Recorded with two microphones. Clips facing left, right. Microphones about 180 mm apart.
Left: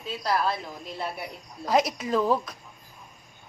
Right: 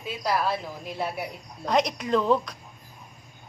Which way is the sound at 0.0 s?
10° right (ahead or behind).